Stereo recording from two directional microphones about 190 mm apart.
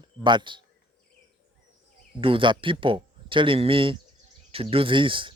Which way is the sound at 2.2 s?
25° right (ahead or behind).